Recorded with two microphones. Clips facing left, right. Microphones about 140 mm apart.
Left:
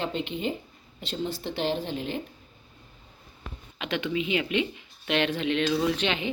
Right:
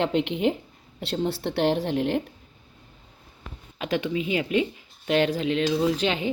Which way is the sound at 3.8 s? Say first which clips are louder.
Right 3 dB; 35° right (ahead or behind).